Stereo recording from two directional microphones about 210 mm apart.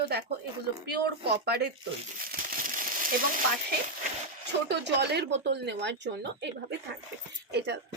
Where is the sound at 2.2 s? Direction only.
40° right (ahead or behind).